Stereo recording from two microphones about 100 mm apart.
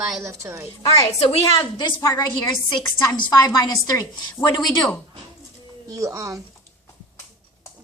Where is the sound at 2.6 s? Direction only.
45° left (ahead or behind); by 4.6 s 30° left (ahead or behind).